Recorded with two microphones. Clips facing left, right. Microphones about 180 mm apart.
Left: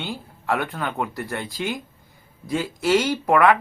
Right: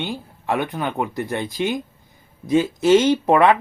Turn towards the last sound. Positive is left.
turn(degrees=-25)  # may be behind; listen again after turning